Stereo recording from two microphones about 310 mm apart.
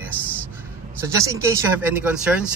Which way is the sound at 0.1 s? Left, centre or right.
Centre.